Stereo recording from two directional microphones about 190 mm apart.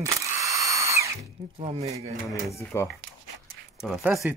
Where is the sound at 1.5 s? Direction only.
35° right (ahead or behind).